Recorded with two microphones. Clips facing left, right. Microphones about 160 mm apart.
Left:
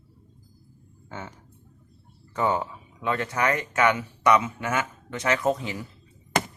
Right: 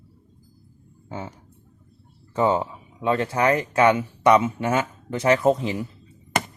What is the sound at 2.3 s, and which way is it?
Speech, 25° right (ahead or behind).